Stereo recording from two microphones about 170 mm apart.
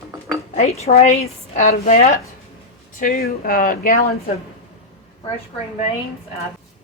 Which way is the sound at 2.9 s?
55° left (ahead or behind).